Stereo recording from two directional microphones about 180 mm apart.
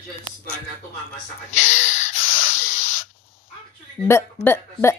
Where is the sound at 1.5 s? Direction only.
90° left.